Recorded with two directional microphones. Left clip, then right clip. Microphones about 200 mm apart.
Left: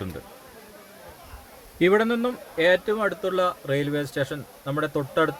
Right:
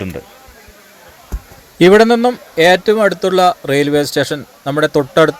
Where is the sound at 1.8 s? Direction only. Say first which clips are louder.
Right 13 dB; 30° right (ahead or behind).